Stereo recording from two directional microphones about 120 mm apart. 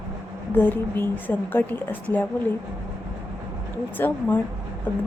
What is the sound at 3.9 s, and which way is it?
Speech, 15° left (ahead or behind).